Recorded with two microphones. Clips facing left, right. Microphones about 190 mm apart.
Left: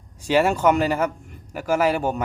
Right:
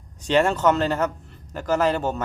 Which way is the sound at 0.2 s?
10° left (ahead or behind).